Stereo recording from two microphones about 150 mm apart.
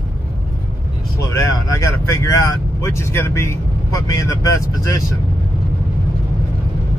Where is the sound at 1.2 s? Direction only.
20° left (ahead or behind).